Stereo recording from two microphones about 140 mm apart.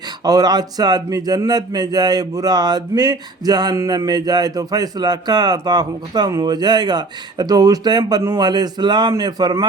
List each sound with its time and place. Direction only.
0.3 s speech: 30° right (ahead or behind)